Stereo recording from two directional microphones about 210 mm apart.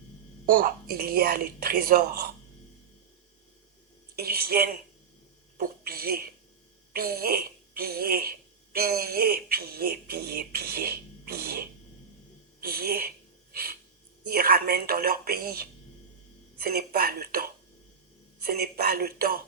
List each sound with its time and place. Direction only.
0.5 s speech: 45° right (ahead or behind)
4.1 s speech: 45° right (ahead or behind)
12.5 s a sound: 45° right (ahead or behind)
14.3 s speech: 45° right (ahead or behind)